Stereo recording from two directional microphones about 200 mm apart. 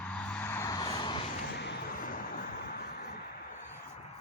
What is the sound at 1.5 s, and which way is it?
Vehicle, 50° left (ahead or behind).